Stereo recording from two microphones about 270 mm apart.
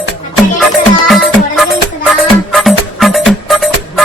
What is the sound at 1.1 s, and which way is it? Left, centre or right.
Music, centre.